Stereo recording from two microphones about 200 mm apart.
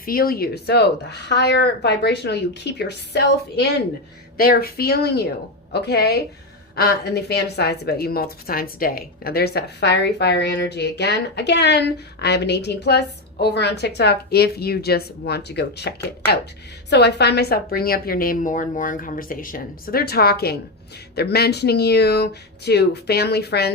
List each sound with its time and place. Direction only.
0.0 s a woman's voice: 45° left (ahead or behind)
16.9 s a woman's voice: 55° left (ahead or behind)